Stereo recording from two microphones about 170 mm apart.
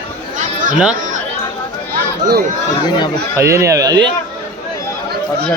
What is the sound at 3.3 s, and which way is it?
Speech, 15° right (ahead or behind).